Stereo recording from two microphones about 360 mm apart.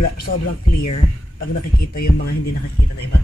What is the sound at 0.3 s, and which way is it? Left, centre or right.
Heart sounds, left.